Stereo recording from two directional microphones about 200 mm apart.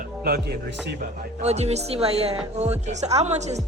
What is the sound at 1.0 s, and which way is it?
A woman's voice, 35° right (ahead or behind).